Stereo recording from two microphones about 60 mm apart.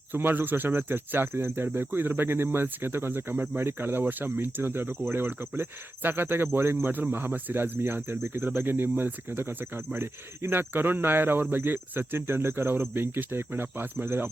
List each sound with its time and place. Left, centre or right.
0.1 s speech: right
3.6 s speech: right